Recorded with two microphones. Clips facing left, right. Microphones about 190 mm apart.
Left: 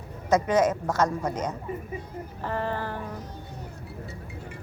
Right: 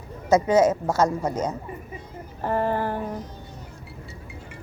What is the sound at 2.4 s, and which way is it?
Speech, 45° right (ahead or behind).